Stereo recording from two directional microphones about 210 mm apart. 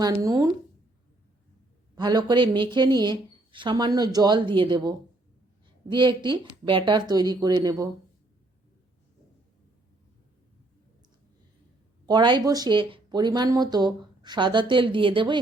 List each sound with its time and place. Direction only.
0.0 s speech: 20° right (ahead or behind)
2.0 s speech: 20° right (ahead or behind)
12.0 s speech: 20° right (ahead or behind)